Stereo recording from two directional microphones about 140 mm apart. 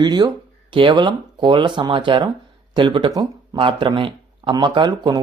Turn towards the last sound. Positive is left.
turn(degrees=-30)  # may be behind; listen again after turning